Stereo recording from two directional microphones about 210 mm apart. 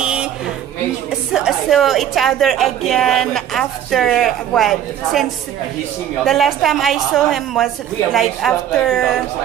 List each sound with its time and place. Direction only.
0.0 s a sound: 5° right (ahead or behind)
1.3 s a woman's voice: centre (ahead or behind)
6.2 s a woman's voice: centre (ahead or behind)